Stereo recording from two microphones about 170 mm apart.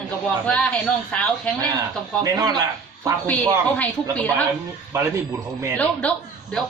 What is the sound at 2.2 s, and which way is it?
Speech, 20° right (ahead or behind).